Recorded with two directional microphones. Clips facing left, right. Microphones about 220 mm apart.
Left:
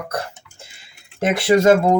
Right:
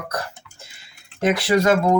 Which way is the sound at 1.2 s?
25° left (ahead or behind).